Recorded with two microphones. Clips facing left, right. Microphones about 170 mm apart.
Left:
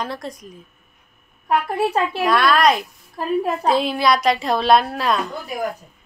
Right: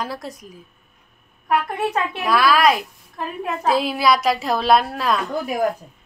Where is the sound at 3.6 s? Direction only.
5° right (ahead or behind).